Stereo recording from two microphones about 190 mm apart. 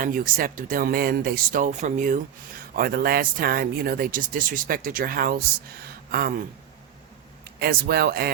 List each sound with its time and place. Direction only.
0.0 s speech: 50° right (ahead or behind)
7.6 s speech: 55° right (ahead or behind)